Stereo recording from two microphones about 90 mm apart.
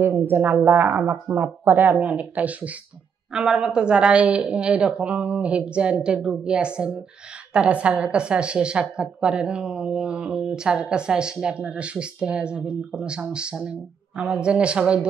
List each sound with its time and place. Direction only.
0.0 s a woman's voice: 25° right (ahead or behind)